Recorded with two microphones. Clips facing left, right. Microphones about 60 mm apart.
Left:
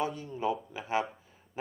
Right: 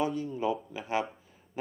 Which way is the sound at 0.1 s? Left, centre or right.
Centre.